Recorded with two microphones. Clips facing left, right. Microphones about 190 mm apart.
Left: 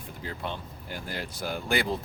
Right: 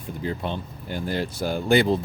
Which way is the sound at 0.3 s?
20° right (ahead or behind).